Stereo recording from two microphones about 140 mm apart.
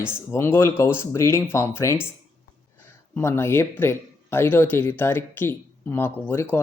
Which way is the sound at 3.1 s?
15° left (ahead or behind).